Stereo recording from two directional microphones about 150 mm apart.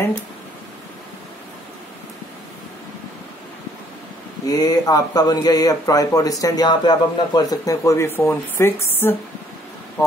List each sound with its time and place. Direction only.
4.5 s speech: 25° left (ahead or behind)